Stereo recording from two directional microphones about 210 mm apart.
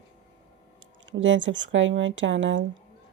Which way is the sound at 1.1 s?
60° right (ahead or behind).